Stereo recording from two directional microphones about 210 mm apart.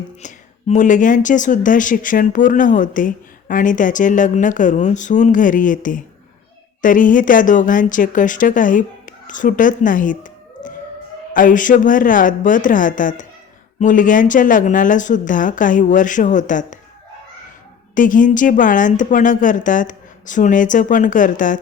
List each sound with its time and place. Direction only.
0.2 s speech: 35° left (ahead or behind)
17.9 s speech: 40° left (ahead or behind)